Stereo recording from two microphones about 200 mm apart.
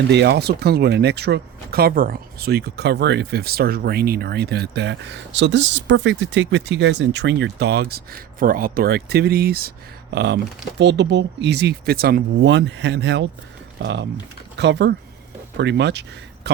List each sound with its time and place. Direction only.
0.1 s speech: 60° right (ahead or behind)